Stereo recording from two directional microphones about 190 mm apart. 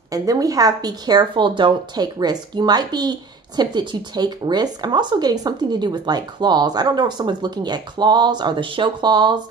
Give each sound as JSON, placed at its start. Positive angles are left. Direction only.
{"t": 0.1, "sound": "speech", "side_deg": -20}